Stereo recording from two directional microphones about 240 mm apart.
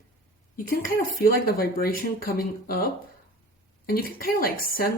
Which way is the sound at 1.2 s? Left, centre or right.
Left.